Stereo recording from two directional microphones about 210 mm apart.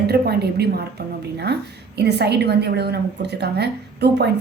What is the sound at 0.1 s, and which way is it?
A woman's voice, 50° right (ahead or behind).